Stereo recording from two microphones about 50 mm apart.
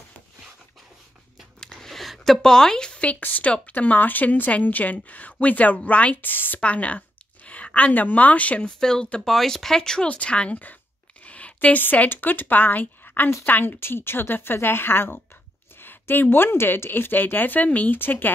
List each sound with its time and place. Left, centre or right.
1.6 s a sound: centre
1.9 s a sound: centre
2.4 s speech: centre
3.2 s speech: left
6.2 s speech: left
6.6 s speech: left
8.6 s speech: centre
10.0 s speech: left
11.2 s a sound: left
11.8 s speech: left
13.7 s speech: left
17.9 s speech: left